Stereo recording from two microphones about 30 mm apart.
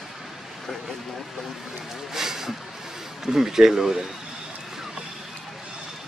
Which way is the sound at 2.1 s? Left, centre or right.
Centre.